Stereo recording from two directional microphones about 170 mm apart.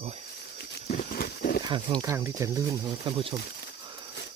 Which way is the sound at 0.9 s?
55° left (ahead or behind).